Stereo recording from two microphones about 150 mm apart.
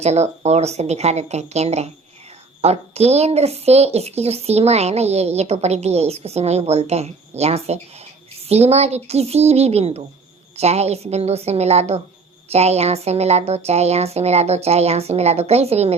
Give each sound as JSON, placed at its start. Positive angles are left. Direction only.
{"t": 0.0, "sound": "speech", "side_deg": -45}